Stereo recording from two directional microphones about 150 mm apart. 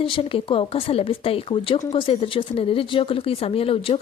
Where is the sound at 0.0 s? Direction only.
35° left (ahead or behind).